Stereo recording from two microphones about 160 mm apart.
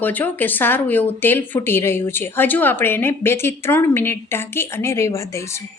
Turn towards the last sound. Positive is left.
turn(degrees=20)  # may be behind; listen again after turning